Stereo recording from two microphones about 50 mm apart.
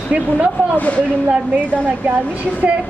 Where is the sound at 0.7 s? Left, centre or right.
Left.